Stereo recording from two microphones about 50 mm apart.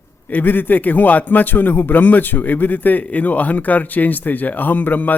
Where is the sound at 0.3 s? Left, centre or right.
Left.